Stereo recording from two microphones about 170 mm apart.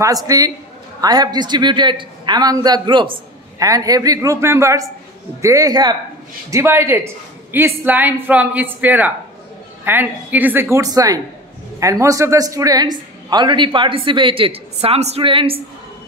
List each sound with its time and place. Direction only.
0.3 s a woman's voice: 20° right (ahead or behind)